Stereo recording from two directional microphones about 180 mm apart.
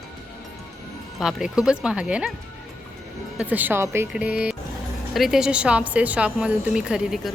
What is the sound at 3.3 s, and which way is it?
A woman's voice, 10° right (ahead or behind).